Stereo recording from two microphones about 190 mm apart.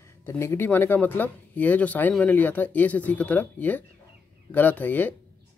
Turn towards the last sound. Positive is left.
turn(degrees=10)  # may be behind; listen again after turning